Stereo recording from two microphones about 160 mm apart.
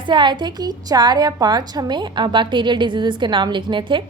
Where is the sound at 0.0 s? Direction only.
30° right (ahead or behind).